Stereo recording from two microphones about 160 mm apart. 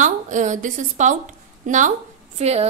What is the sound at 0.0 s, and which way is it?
A woman's voice, 50° right (ahead or behind).